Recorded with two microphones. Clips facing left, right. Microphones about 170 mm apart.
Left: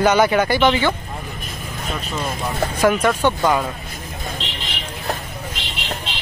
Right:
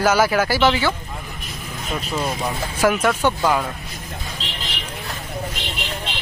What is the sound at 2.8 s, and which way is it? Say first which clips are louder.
Speech: left 1 dB; 5° right (ahead or behind).